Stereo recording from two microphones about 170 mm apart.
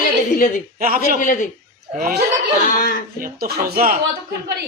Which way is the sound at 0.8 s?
55° right (ahead or behind).